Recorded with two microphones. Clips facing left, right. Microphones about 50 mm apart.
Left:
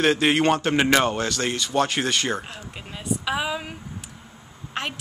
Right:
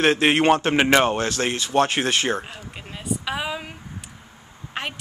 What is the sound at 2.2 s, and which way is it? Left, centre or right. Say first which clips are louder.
A woman's voice: right 2 dB; centre.